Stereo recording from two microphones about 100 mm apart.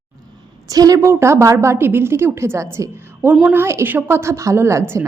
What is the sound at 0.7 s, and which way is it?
A woman's voice, 35° right (ahead or behind).